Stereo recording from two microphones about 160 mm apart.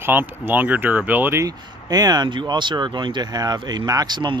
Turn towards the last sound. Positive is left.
turn(degrees=-30)  # may be behind; listen again after turning